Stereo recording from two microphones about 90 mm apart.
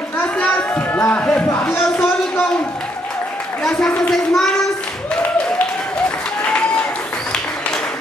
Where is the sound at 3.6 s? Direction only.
5° left (ahead or behind).